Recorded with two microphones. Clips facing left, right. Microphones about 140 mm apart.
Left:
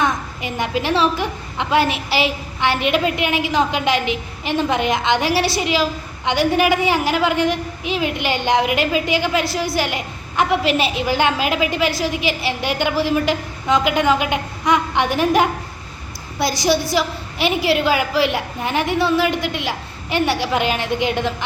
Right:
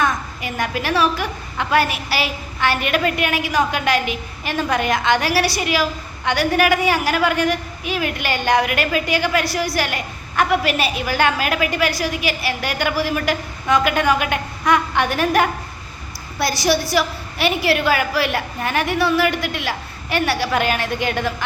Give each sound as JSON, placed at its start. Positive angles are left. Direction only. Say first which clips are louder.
{"t": 0.0, "sound": "a woman's voice", "louder": "even", "side_deg": 20}